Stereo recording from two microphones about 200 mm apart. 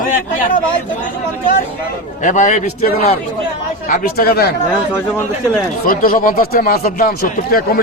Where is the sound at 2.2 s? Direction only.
40° left (ahead or behind).